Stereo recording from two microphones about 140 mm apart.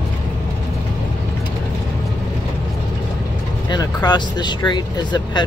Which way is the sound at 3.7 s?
30° left (ahead or behind).